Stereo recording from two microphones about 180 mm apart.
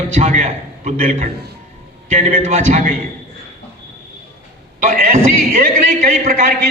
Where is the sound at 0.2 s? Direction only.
40° right (ahead or behind).